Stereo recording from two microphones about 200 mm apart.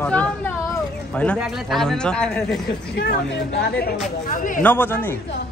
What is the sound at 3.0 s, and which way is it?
Speech, 55° left (ahead or behind).